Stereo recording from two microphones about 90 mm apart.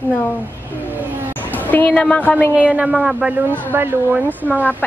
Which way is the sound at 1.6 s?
20° left (ahead or behind).